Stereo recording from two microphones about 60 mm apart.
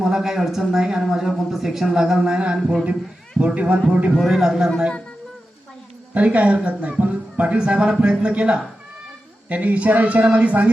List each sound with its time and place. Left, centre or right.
0.0 s speech: centre
4.1 s speech: centre
6.1 s speech: right